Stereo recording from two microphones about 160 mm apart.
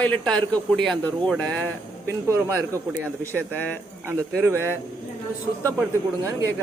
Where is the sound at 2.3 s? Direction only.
15° right (ahead or behind).